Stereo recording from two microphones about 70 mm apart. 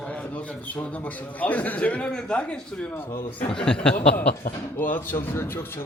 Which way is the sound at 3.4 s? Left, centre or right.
Centre.